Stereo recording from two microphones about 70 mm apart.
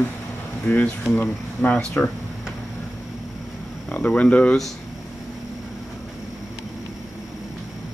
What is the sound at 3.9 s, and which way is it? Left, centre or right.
Speech, left.